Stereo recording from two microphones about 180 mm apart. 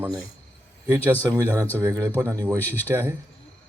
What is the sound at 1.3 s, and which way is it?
Speech, 15° right (ahead or behind).